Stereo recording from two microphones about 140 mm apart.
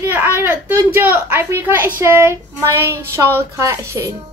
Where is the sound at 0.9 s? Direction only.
15° right (ahead or behind).